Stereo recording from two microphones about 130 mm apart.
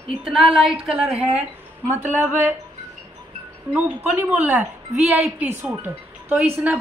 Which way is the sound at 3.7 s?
10° right (ahead or behind).